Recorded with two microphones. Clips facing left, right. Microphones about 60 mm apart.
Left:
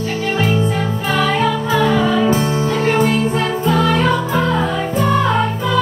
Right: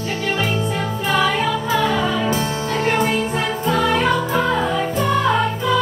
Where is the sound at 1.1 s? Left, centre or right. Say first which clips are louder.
Left 2 dB; centre.